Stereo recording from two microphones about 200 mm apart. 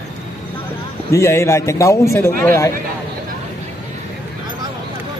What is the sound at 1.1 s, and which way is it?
A man's voice, 15° left (ahead or behind).